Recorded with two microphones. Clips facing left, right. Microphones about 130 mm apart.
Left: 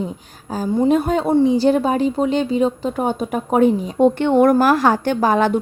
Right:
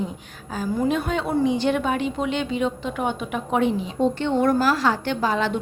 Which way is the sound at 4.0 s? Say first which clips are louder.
Left 8 dB; 55° left (ahead or behind).